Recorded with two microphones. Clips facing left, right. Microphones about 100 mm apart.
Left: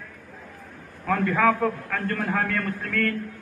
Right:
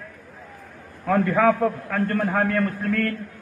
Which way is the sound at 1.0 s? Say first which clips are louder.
Right 3 dB; 20° right (ahead or behind).